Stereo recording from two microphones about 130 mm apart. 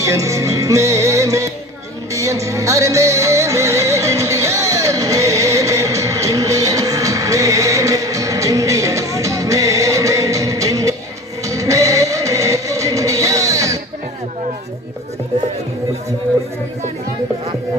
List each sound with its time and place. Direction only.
0.0 s music: 25° right (ahead or behind)